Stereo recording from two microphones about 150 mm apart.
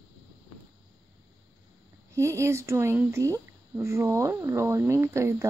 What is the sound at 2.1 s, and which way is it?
Speech, 20° right (ahead or behind).